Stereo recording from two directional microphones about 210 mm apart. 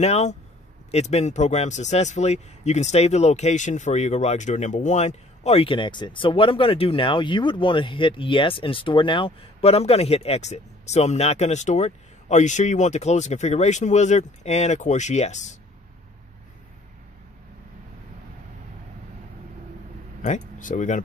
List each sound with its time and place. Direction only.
0.0 s speech: 30° left (ahead or behind)
20.2 s speech: 35° left (ahead or behind)